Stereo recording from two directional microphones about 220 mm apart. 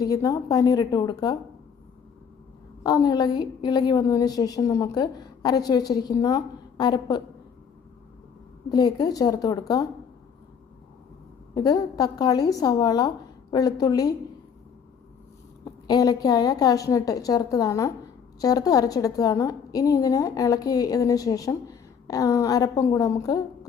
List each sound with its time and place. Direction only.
0.0 s a woman's voice: 15° left (ahead or behind)
2.8 s a woman's voice: 15° left (ahead or behind)
8.7 s a woman's voice: 15° left (ahead or behind)
11.5 s a woman's voice: 15° left (ahead or behind)
15.9 s a woman's voice: 15° left (ahead or behind)